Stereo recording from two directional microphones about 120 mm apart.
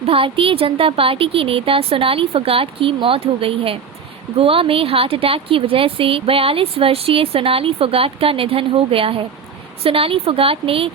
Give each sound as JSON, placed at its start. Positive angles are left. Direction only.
{"t": 0.0, "sound": "a woman's voice", "side_deg": -50}